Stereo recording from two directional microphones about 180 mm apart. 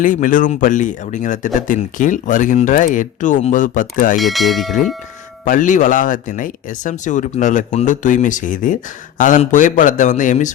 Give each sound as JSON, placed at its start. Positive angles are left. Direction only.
{"t": 0.0, "sound": "speech", "side_deg": 45}
{"t": 4.2, "sound": "speech", "side_deg": 0}
{"t": 5.5, "sound": "speech", "side_deg": 45}